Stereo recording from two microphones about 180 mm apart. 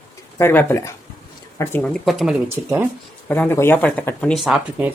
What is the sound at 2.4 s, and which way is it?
Speech, 15° right (ahead or behind).